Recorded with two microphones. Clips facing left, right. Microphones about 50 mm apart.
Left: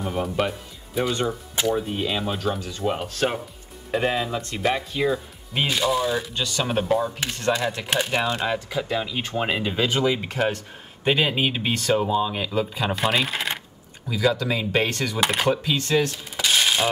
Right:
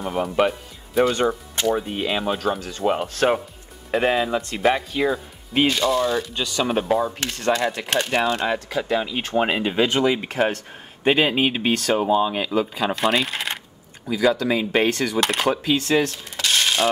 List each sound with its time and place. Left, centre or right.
0.0 s speech: centre
1.5 s music: centre
1.8 s speech: centre
5.7 s speech: centre
6.3 s speech: centre
7.2 s speech: centre
12.4 s speech: centre
14.0 s speech: centre
15.1 s speech: centre
15.6 s speech: centre
16.3 s mechanisms: centre